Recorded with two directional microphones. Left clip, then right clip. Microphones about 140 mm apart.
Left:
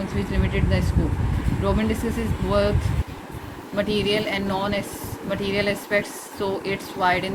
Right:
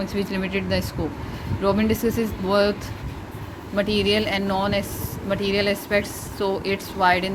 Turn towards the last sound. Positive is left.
turn(degrees=-45)  # may be behind; listen again after turning